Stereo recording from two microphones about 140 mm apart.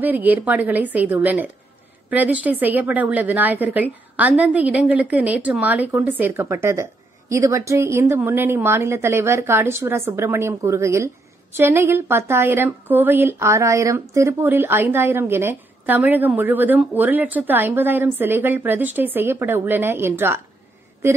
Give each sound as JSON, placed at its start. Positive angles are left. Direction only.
{"t": 0.0, "sound": "a woman's voice", "side_deg": -10}